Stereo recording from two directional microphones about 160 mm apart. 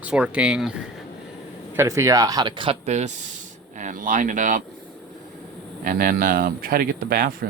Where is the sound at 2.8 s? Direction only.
45° right (ahead or behind).